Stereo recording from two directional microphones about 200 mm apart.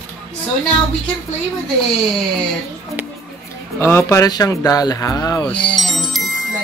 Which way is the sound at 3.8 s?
15° left (ahead or behind).